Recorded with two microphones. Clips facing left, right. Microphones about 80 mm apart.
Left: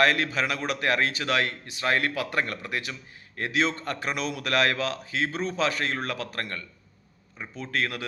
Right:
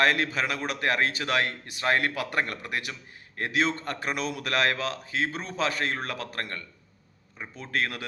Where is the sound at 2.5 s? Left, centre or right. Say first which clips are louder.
Left 1 dB; right.